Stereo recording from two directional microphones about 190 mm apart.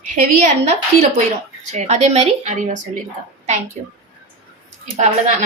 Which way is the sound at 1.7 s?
35° right (ahead or behind).